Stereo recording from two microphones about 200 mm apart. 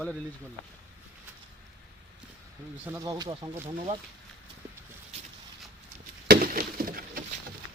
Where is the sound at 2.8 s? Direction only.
10° right (ahead or behind).